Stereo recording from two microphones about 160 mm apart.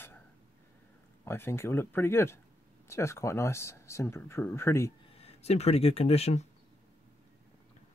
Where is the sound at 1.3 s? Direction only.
15° left (ahead or behind).